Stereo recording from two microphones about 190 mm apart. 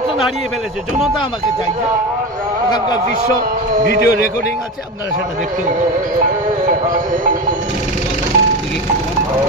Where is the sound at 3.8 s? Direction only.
45° right (ahead or behind).